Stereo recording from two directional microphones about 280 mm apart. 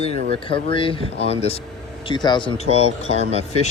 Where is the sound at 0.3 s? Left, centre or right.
Centre.